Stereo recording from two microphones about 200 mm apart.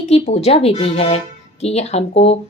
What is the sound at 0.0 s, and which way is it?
Speech, 30° left (ahead or behind).